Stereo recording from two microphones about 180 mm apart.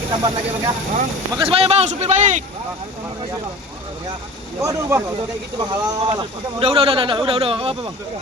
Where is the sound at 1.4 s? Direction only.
35° right (ahead or behind).